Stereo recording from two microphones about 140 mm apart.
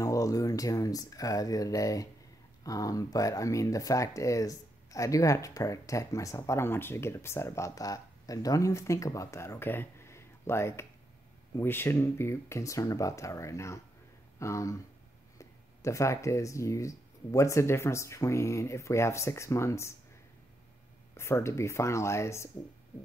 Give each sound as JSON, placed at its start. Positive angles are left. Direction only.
{"t": 0.0, "sound": "speech", "side_deg": 25}
{"t": 21.2, "sound": "speech", "side_deg": 20}